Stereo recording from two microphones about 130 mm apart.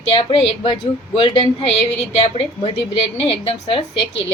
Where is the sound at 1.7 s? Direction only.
50° left (ahead or behind).